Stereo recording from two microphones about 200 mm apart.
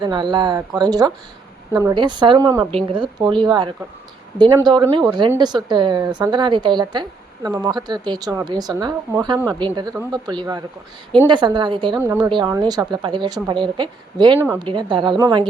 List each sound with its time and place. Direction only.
0.0 s speech: 20° right (ahead or behind)
11.9 s speech: 10° right (ahead or behind)
14.3 s speech: 10° right (ahead or behind)
14.6 s speech: 25° right (ahead or behind)